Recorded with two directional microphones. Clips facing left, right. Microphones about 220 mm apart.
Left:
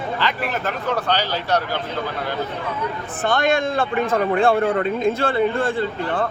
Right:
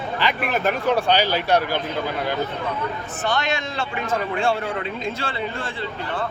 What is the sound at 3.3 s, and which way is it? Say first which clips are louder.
A man's voice: left 6 dB; 55° left (ahead or behind).